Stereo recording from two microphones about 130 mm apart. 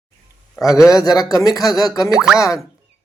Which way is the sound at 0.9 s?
30° left (ahead or behind).